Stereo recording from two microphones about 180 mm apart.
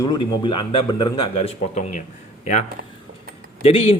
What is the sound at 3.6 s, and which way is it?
Speech, 35° left (ahead or behind).